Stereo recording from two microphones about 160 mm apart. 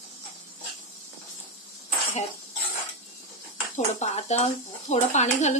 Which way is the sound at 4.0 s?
45° left (ahead or behind).